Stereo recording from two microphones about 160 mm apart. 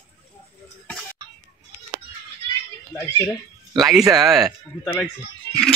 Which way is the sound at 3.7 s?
Centre (ahead or behind).